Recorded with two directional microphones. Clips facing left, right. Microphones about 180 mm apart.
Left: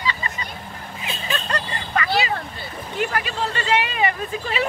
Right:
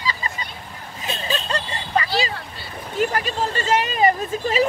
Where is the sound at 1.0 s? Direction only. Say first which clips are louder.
Right 3 dB; 30° right (ahead or behind).